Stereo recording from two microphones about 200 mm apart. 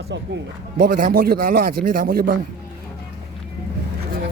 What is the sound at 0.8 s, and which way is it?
A man's voice, 45° right (ahead or behind).